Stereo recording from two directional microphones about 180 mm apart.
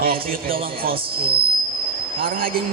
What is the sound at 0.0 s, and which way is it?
Speech, 55° right (ahead or behind).